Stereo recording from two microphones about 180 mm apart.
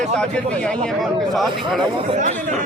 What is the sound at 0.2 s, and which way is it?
Speech, 5° left (ahead or behind).